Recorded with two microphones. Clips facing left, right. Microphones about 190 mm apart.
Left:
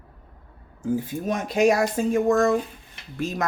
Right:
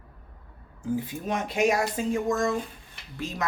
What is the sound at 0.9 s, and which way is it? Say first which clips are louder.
A man's voice: left 3 dB; 45° left (ahead or behind).